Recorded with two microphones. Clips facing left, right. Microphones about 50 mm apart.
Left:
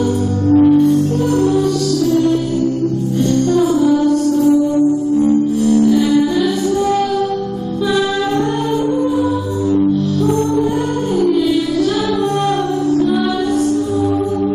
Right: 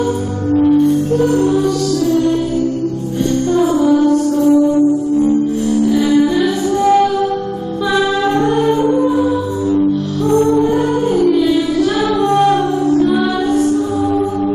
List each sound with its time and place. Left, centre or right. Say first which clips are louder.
1.3 s music: right 1 dB; right
3.6 s music: right 1 dB; centre
11.1 s music: even; centre